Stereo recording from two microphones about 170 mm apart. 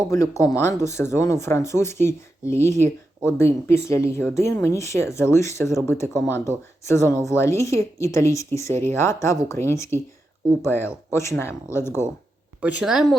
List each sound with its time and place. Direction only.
0.1 s speech: 20° left (ahead or behind)
12.6 s speech: 5° right (ahead or behind)